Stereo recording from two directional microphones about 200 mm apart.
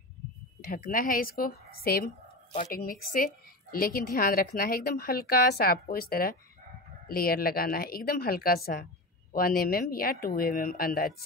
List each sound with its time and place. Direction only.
0.7 s a woman's voice: 45° left (ahead or behind)